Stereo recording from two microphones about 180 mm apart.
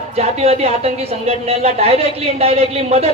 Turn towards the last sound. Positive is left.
turn(degrees=-35)  # may be behind; listen again after turning